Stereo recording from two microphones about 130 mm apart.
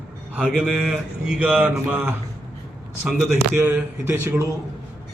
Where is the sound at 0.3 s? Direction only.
10° right (ahead or behind).